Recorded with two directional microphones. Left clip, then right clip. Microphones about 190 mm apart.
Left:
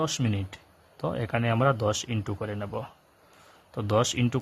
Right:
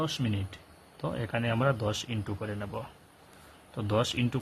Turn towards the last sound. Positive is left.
turn(degrees=35)  # may be behind; listen again after turning